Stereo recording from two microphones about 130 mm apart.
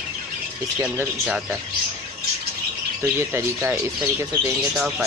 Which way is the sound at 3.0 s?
20° right (ahead or behind).